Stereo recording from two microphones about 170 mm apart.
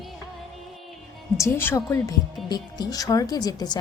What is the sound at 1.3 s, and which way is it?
A woman's voice, 15° left (ahead or behind).